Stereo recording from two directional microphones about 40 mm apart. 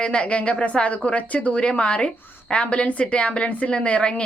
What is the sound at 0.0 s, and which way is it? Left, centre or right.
A woman's voice, left.